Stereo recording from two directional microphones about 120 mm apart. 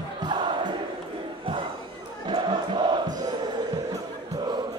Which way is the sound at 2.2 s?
40° right (ahead or behind).